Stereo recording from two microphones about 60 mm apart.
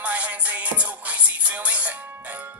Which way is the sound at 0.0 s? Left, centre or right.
Right.